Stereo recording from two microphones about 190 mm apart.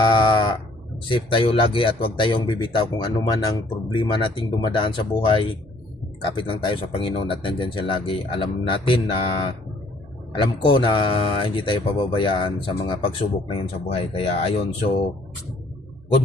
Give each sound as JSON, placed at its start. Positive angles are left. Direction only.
{"t": 0.1, "sound": "sheep", "side_deg": 25}
{"t": 1.0, "sound": "speech", "side_deg": 25}